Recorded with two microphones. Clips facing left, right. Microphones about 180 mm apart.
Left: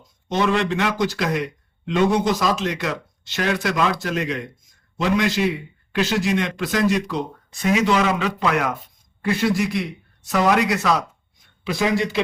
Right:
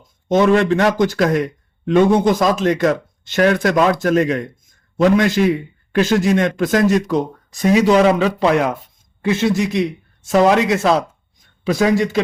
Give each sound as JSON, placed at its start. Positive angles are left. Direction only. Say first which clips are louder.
{"t": 0.3, "sound": "a man's voice", "louder": "right 7 dB", "side_deg": -50}
{"t": 11.6, "sound": "a man's voice", "louder": "right 6 dB", "side_deg": -45}